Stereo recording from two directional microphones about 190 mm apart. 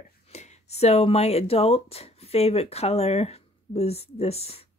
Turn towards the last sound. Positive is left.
turn(degrees=35)  # may be behind; listen again after turning